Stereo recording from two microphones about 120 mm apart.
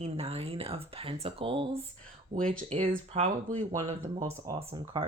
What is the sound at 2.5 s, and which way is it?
Speech, 75° right (ahead or behind).